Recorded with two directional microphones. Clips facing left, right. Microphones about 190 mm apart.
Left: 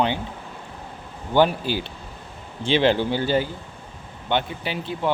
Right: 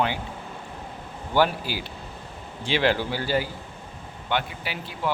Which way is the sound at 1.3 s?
25° left (ahead or behind).